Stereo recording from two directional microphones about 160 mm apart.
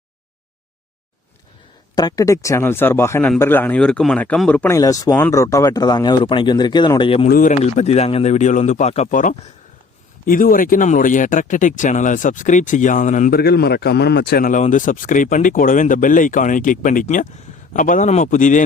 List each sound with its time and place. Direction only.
2.0 s speech: 25° left (ahead or behind)
4.8 s speech: 20° left (ahead or behind)
7.3 s a man's voice: 65° left (ahead or behind)
7.5 s speech: 40° left (ahead or behind)
13.3 s a man's voice: 90° left; by 18.6 s 55° left (ahead or behind)